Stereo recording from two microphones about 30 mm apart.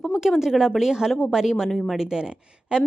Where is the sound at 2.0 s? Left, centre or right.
Right.